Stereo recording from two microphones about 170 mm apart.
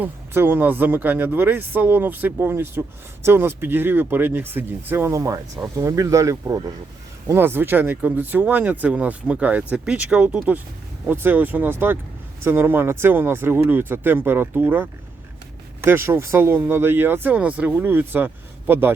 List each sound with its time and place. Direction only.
0.0 s speech: 10° right (ahead or behind)